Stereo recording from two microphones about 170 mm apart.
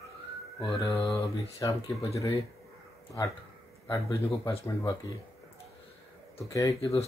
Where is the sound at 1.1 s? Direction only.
15° left (ahead or behind).